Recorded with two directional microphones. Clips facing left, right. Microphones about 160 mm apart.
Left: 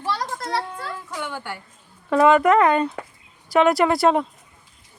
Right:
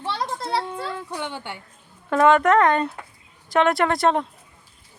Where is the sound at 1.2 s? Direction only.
25° right (ahead or behind).